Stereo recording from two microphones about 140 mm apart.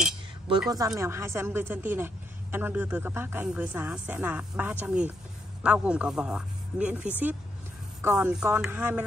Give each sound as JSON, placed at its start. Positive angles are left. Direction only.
{"t": 0.9, "sound": "a woman's voice", "side_deg": -20}